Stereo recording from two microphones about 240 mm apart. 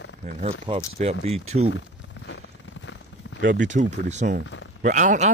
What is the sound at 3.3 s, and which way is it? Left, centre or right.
Speech, right.